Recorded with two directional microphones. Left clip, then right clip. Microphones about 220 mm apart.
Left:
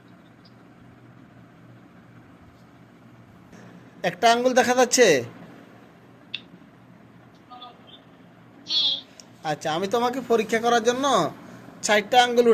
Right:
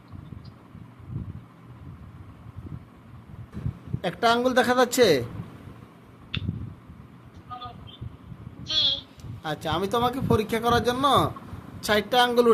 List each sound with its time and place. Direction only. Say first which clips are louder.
4.0 s a woman's voice: left 3 dB; 15° right (ahead or behind)
8.6 s a sound: left 1 dB; 35° right (ahead or behind)
9.4 s speech: left 2 dB; 20° right (ahead or behind)